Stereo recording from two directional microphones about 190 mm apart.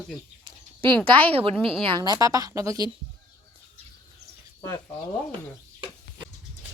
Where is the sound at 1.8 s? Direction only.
20° right (ahead or behind).